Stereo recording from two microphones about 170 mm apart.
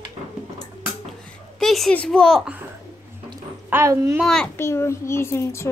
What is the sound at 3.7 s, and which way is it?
Speech, 15° right (ahead or behind).